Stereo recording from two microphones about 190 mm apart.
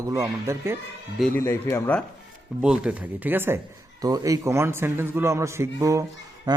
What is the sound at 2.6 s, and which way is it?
A man's voice, 5° right (ahead or behind).